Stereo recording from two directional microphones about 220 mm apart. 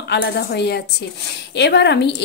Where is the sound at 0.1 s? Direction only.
50° left (ahead or behind).